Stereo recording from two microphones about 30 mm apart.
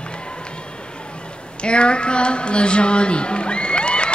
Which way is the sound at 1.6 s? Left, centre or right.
Left.